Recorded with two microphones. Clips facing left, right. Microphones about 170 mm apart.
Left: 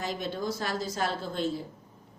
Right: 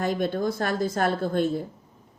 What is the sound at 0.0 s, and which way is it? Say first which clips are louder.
A woman's voice: right 7 dB; 55° right (ahead or behind).